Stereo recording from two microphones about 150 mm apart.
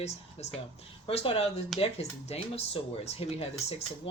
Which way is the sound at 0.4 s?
45° left (ahead or behind).